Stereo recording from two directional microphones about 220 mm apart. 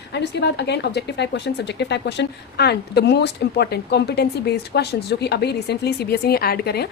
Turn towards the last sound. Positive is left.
turn(degrees=45)  # may be behind; listen again after turning